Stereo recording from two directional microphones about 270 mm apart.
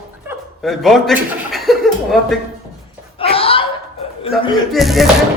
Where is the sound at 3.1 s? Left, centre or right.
Left.